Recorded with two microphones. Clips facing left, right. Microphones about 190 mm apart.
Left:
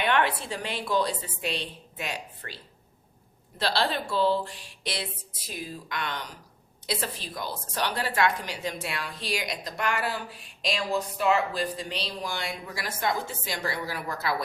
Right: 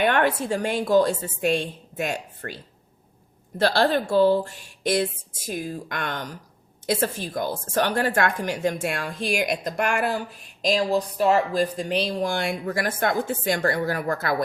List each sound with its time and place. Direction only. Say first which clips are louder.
0.0 s a woman's voice: right 5 dB; 45° right (ahead or behind)
3.6 s a woman's voice: right 7 dB; 50° right (ahead or behind)